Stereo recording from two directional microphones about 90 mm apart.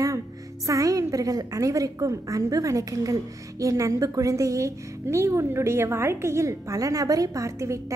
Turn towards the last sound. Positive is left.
turn(degrees=-35)  # may be behind; listen again after turning